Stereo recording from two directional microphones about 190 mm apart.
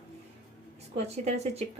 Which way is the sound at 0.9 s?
35° right (ahead or behind).